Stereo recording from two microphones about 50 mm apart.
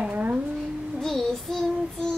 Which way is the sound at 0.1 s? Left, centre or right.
Right.